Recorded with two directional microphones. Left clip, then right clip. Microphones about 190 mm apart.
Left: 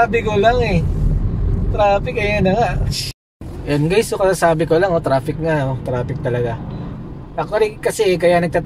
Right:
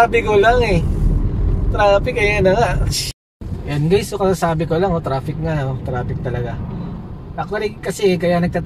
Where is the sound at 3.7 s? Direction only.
50° left (ahead or behind).